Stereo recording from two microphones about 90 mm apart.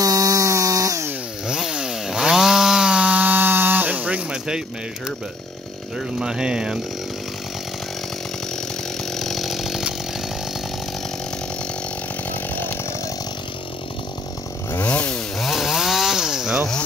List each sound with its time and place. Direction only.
0.0 s chainsaw: 40° right (ahead or behind)
1.5 s chainsaw: 5° right (ahead or behind)
5.9 s speech: 5° right (ahead or behind)
9.1 s chainsaw: 5° left (ahead or behind)
14.7 s chainsaw: 15° left (ahead or behind)
15.3 s chainsaw: centre (ahead or behind)